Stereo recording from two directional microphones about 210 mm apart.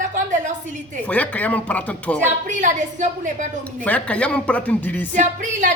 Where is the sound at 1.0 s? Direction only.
5° left (ahead or behind).